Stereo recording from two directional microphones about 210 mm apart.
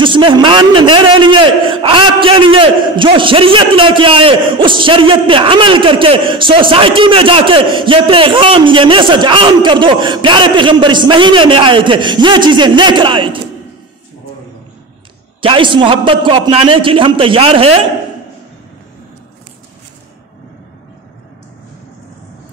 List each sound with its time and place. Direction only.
0.0 s a man's voice: 25° right (ahead or behind)
15.4 s a man's voice: 25° right (ahead or behind)